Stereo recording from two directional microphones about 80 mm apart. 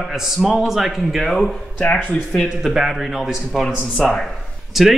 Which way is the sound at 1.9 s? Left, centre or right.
Centre.